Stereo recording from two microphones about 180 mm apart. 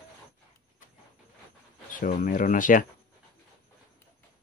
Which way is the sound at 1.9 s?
50° left (ahead or behind).